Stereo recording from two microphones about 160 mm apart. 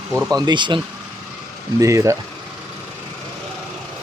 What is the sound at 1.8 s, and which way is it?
Speech, 20° right (ahead or behind).